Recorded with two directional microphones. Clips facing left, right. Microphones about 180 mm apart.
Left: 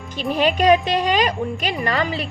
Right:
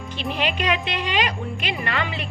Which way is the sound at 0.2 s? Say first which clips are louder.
Left 7 dB; 40° left (ahead or behind).